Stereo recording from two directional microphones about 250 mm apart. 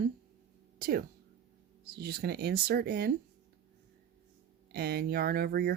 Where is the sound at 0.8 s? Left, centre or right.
Right.